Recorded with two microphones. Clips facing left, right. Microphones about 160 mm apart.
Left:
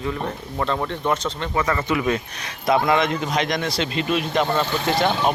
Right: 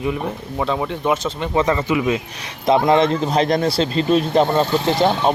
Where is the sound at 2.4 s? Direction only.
25° right (ahead or behind).